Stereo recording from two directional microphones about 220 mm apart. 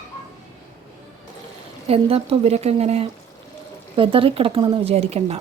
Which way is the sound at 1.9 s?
25° right (ahead or behind).